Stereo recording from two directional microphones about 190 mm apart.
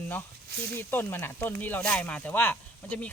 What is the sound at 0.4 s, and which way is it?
Speech, 60° right (ahead or behind).